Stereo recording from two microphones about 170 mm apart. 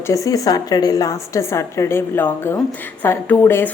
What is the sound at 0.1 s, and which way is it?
A woman's voice, 20° left (ahead or behind).